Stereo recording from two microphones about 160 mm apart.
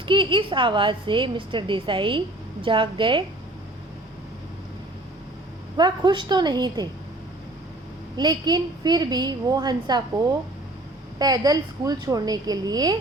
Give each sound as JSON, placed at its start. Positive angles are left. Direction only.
{"t": 0.0, "sound": "a woman's voice", "side_deg": -30}
{"t": 5.7, "sound": "a woman's voice", "side_deg": -25}
{"t": 8.1, "sound": "a woman's voice", "side_deg": -25}
{"t": 11.2, "sound": "a woman's voice", "side_deg": -25}